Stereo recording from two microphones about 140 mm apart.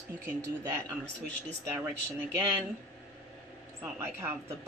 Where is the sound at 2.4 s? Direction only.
15° right (ahead or behind).